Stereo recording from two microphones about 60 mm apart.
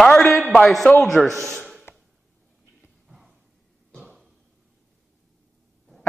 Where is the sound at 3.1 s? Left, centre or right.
Centre.